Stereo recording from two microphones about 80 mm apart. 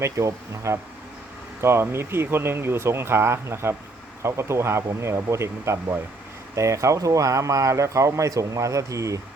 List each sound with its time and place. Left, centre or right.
0.0 s speech: right